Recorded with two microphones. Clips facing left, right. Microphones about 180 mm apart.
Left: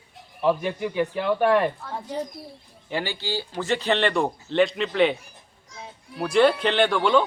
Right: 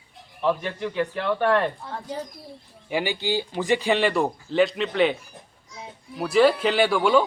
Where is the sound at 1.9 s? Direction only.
20° left (ahead or behind).